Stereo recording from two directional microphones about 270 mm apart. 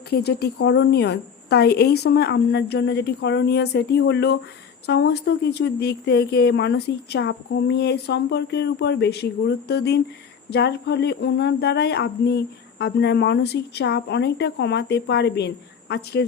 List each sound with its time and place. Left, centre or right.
0.1 s speech: left